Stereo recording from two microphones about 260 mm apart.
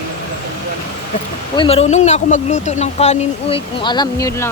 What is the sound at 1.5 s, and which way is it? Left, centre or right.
Speech, left.